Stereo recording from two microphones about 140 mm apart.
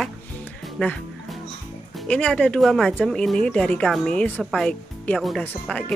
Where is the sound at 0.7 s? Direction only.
5° left (ahead or behind).